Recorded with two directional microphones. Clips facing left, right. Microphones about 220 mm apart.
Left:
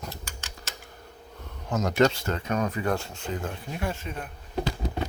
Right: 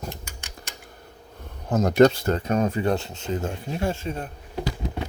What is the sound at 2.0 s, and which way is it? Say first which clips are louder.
Speech: right 7 dB; 40° right (ahead or behind).